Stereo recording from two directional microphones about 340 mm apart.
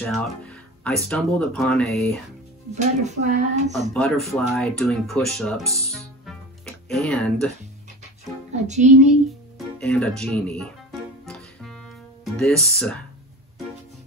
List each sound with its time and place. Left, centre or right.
0.0 s speech: centre
2.7 s speech: right
3.9 s speech: centre
8.5 s speech: right
9.8 s music: centre
12.4 s speech: centre